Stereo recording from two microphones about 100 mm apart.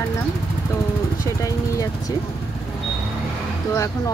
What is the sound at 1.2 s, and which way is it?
Speech, 35° left (ahead or behind).